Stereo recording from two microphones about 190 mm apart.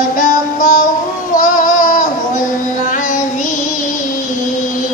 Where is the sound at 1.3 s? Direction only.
45° left (ahead or behind).